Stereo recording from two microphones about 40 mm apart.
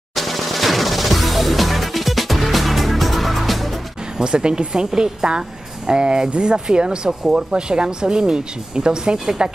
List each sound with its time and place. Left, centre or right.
0.1 s music: centre
4.2 s speech: right